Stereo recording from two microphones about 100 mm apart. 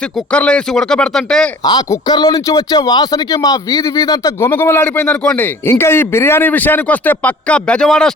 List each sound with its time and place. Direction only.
0.3 s a man's voice: 10° left (ahead or behind)
2.0 s a man's voice: 45° left (ahead or behind); by 5.5 s 10° left (ahead or behind)
5.6 s a man's voice: 25° left (ahead or behind); by 8.1 s 5° left (ahead or behind)